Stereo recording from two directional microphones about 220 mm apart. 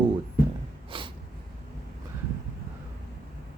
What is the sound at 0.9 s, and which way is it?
Snort, 20° right (ahead or behind).